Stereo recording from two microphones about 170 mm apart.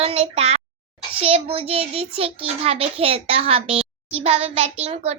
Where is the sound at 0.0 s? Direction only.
35° right (ahead or behind).